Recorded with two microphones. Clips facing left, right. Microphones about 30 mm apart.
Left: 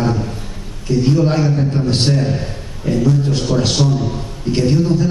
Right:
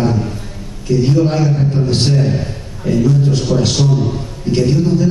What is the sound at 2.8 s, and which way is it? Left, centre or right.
Speech, centre.